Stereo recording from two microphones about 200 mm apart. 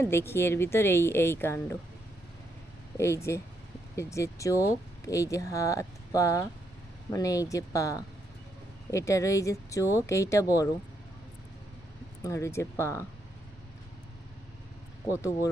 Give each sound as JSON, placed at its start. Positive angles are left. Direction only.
{"t": 0.0, "sound": "speech", "side_deg": 10}
{"t": 3.0, "sound": "speech", "side_deg": 15}
{"t": 12.2, "sound": "speech", "side_deg": 15}